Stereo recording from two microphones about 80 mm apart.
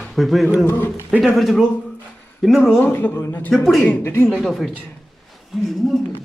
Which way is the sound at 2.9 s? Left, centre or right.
Left.